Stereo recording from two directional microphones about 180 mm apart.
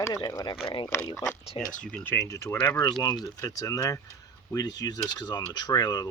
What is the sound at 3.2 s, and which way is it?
Speech, 20° left (ahead or behind).